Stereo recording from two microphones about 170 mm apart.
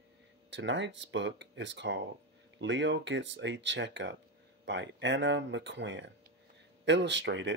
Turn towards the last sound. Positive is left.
turn(degrees=-90)